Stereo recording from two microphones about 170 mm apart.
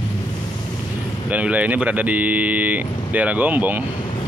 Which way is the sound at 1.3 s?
10° right (ahead or behind).